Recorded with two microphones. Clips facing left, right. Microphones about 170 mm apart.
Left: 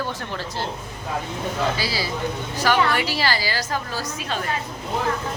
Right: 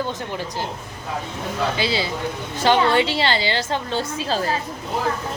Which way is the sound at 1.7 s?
20° right (ahead or behind).